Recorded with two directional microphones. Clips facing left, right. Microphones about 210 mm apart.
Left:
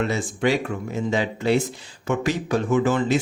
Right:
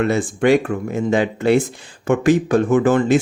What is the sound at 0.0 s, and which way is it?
Speech, 55° right (ahead or behind).